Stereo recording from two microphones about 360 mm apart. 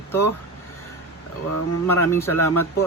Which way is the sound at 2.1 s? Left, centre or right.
Centre.